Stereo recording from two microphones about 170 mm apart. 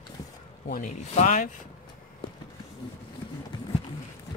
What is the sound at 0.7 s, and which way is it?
Speech, 45° left (ahead or behind).